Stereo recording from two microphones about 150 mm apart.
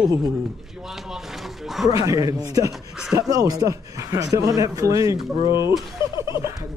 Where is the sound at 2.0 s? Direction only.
25° right (ahead or behind).